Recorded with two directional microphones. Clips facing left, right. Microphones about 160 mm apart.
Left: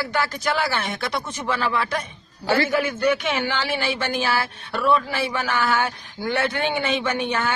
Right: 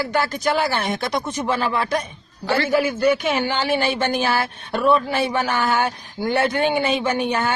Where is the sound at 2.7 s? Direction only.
35° right (ahead or behind).